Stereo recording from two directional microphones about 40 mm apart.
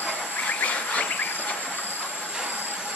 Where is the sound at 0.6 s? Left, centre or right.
Left.